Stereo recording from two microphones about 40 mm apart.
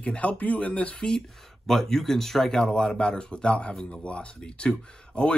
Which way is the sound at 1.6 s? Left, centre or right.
Centre.